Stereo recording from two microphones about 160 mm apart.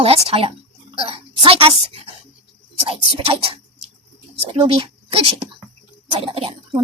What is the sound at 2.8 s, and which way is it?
A woman's voice, 35° right (ahead or behind).